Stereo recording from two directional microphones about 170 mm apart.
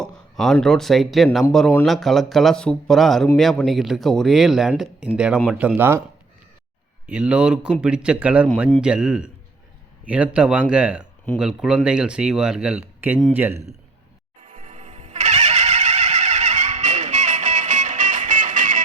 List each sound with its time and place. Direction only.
0.0 s speech: 5° left (ahead or behind); by 6.0 s 10° right (ahead or behind)
7.1 s speech: 5° right (ahead or behind)
14.4 s music: 50° right (ahead or behind)